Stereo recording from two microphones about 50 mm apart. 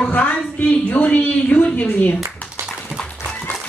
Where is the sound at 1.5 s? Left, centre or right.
Left.